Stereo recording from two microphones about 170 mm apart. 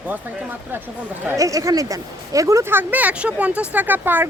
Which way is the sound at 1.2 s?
20° right (ahead or behind).